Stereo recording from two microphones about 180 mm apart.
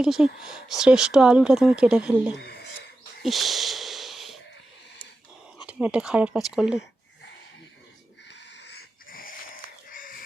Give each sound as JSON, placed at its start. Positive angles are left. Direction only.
{"t": 0.0, "sound": "speech", "side_deg": 0}
{"t": 2.4, "sound": "a sound", "side_deg": 60}
{"t": 3.2, "sound": "a sound", "side_deg": 0}
{"t": 5.6, "sound": "speech", "side_deg": -5}
{"t": 8.5, "sound": "dog", "side_deg": 65}
{"t": 9.9, "sound": "chicken", "side_deg": 50}